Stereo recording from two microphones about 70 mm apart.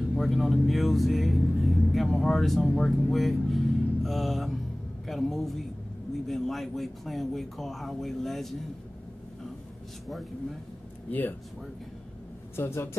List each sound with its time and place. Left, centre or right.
0.1 s a man's voice: centre
11.1 s speech: left
12.5 s speech: left